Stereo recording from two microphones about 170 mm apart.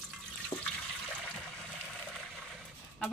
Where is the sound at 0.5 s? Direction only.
30° left (ahead or behind).